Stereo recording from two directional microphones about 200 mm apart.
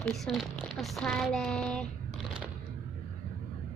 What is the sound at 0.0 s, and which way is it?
Speech, centre (ahead or behind).